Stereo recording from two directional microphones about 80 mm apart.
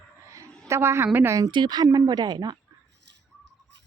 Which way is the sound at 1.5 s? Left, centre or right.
Right.